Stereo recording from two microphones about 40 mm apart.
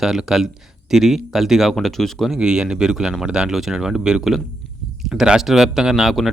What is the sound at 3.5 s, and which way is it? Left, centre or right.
Speech, centre.